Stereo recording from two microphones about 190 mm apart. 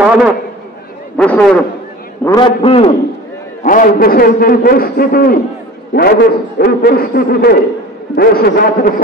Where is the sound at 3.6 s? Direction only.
45° left (ahead or behind).